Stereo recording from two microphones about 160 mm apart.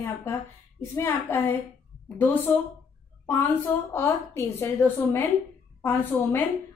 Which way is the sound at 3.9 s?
15° left (ahead or behind).